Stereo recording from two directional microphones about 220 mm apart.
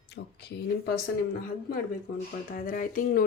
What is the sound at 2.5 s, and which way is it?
Speech, 40° left (ahead or behind).